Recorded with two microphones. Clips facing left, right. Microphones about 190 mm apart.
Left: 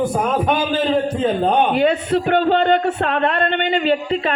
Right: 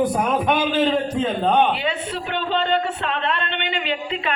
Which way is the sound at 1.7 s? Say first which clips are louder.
Left 9 dB; 50° left (ahead or behind).